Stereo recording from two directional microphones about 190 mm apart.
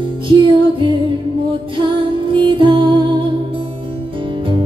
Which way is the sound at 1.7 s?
25° right (ahead or behind).